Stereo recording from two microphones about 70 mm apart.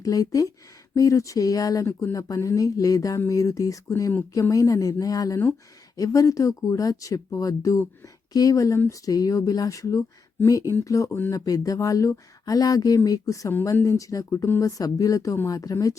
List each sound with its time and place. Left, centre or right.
0.0 s speech: left